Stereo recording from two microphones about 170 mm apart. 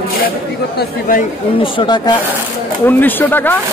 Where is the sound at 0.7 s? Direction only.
55° left (ahead or behind).